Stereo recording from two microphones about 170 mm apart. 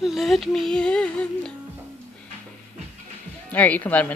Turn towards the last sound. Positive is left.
turn(degrees=10)  # may be behind; listen again after turning